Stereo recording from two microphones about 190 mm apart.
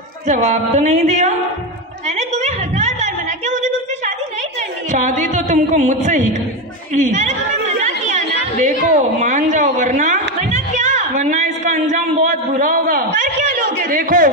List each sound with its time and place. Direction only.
0.3 s speech: 40° right (ahead or behind)
2.0 s a sound: 35° right (ahead or behind)
4.9 s speech: 40° right (ahead or behind)
7.8 s chatter: 40° right (ahead or behind)